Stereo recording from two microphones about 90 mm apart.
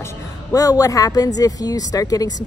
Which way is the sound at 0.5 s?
40° left (ahead or behind).